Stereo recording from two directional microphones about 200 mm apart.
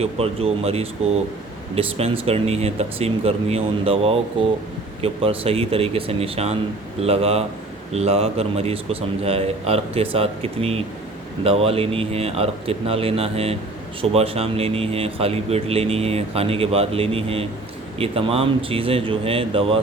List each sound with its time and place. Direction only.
0.0 s speech: 30° right (ahead or behind)